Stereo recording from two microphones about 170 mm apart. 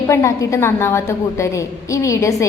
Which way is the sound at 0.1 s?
20° left (ahead or behind).